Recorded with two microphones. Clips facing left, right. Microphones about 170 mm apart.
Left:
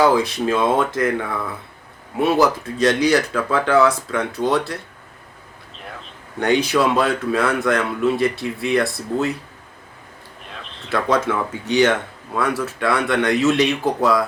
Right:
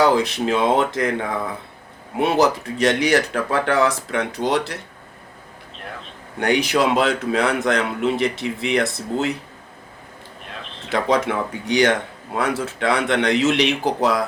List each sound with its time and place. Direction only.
0.1 s speech: 20° right (ahead or behind)
2.1 s speech: 20° right (ahead or behind)
6.4 s speech: 10° right (ahead or behind)
10.9 s speech: 15° right (ahead or behind)